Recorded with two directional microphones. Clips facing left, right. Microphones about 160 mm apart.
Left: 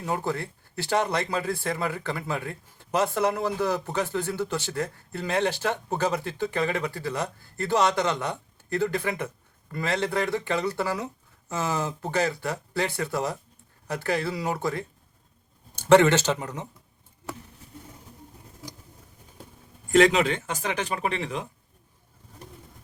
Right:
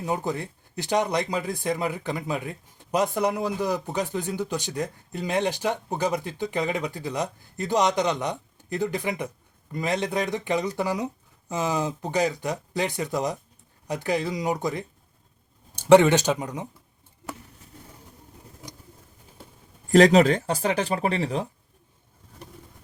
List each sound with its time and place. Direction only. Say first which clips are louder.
0.0 s speech: right 1 dB; 15° right (ahead or behind)
19.9 s speech: right 4 dB; 40° right (ahead or behind)